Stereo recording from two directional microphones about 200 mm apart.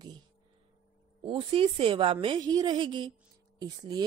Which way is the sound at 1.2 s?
25° right (ahead or behind).